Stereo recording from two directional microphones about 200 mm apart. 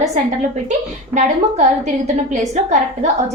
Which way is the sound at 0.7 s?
35° right (ahead or behind).